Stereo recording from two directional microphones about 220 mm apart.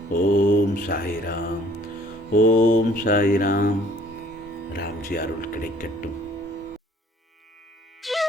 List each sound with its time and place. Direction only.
0.1 s mantra: 35° left (ahead or behind)
4.7 s mantra: 45° left (ahead or behind)
8.0 s music: centre (ahead or behind)